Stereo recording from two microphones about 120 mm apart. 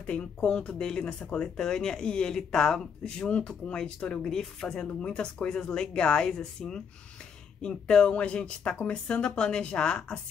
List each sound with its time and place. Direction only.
0.0 s speech: 10° left (ahead or behind)